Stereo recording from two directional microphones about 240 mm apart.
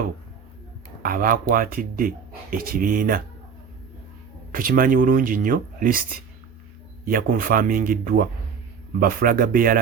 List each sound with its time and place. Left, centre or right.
1.0 s speech: right
4.5 s speech: right